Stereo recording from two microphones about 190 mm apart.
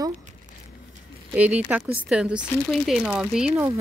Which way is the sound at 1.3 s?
10° right (ahead or behind).